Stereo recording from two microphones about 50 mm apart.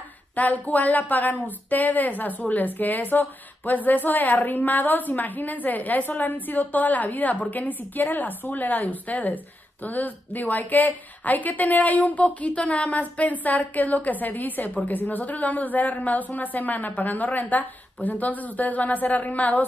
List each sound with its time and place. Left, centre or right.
0.4 s a woman's voice: left